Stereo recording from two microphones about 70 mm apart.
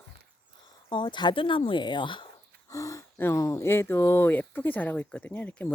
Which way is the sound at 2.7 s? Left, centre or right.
Left.